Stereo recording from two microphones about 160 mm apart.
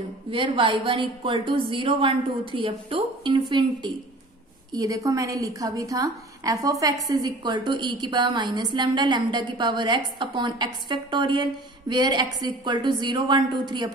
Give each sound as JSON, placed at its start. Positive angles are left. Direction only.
{"t": 0.3, "sound": "a woman's voice", "side_deg": -30}